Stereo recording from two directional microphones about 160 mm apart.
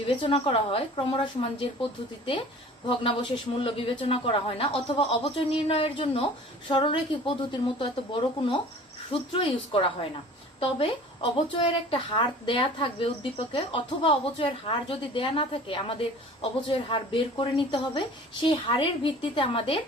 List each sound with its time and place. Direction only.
0.2 s a woman's voice: 35° left (ahead or behind)
2.9 s a woman's voice: 35° left (ahead or behind)